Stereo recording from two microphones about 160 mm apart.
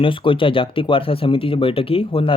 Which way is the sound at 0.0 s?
30° left (ahead or behind).